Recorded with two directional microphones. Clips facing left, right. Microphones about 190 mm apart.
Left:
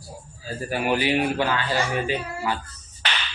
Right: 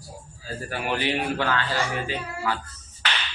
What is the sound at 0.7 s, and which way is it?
Speech, 10° left (ahead or behind).